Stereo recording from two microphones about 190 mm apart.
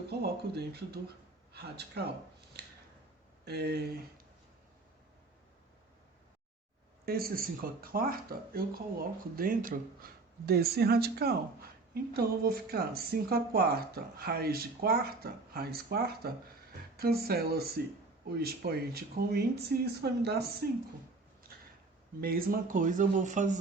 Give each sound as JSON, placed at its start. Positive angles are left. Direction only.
{"t": 0.1, "sound": "speech", "side_deg": -60}
{"t": 3.4, "sound": "speech", "side_deg": -60}
{"t": 7.0, "sound": "speech", "side_deg": -50}
{"t": 22.2, "sound": "speech", "side_deg": -50}